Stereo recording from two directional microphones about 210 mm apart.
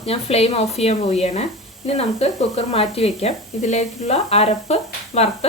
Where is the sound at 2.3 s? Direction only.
Centre (ahead or behind).